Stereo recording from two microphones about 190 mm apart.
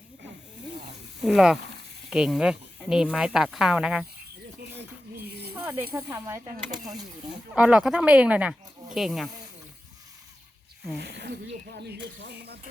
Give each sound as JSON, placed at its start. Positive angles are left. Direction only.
{"t": 1.2, "sound": "speech", "side_deg": 0}
{"t": 5.5, "sound": "speech", "side_deg": -10}
{"t": 7.5, "sound": "speech", "side_deg": -5}
{"t": 10.9, "sound": "speech", "side_deg": -60}
{"t": 11.8, "sound": "mechanisms", "side_deg": -65}